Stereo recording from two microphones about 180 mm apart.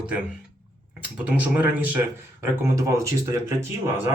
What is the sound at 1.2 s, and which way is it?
Speech, 10° right (ahead or behind).